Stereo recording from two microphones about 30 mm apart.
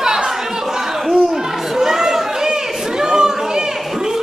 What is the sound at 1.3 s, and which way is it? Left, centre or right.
Chatter, centre.